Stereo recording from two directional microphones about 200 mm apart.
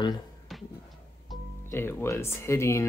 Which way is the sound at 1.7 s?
10° left (ahead or behind).